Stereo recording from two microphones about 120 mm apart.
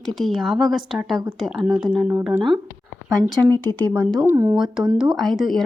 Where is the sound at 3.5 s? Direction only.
15° left (ahead or behind).